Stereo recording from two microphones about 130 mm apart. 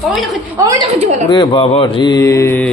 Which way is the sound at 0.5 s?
25° right (ahead or behind).